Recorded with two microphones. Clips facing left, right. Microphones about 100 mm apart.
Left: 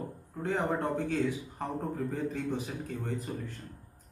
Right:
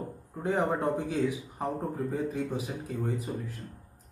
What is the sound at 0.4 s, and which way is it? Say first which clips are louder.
A man's voice: right 2 dB; 20° right (ahead or behind).